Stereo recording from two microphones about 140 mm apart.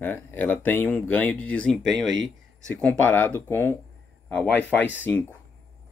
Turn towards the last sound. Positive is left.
turn(degrees=15)  # may be behind; listen again after turning